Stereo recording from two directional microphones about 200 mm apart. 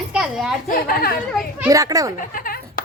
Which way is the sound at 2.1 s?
45° left (ahead or behind).